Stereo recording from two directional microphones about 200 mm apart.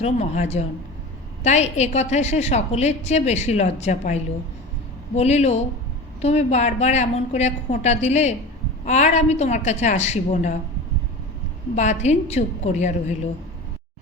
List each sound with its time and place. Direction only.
0.0 s a woman's voice: 35° left (ahead or behind)
11.7 s a woman's voice: 35° left (ahead or behind)